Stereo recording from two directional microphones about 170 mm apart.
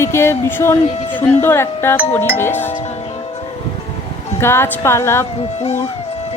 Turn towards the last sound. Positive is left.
turn(degrees=15)  # may be behind; listen again after turning